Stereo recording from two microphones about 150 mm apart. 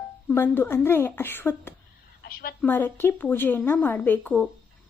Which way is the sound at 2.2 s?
80° left.